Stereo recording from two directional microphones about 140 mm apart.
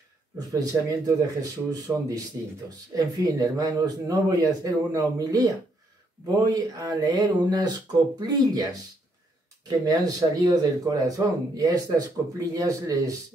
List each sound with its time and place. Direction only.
0.5 s speech: 25° right (ahead or behind)
9.7 s speech: 25° right (ahead or behind)